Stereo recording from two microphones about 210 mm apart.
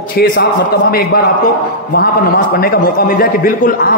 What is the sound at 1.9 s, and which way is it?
A man's voice, 45° left (ahead or behind).